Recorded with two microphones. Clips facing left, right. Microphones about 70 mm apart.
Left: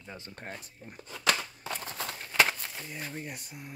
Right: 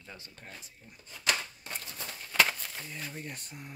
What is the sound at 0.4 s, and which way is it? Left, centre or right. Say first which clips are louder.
Speech: left 6 dB; left.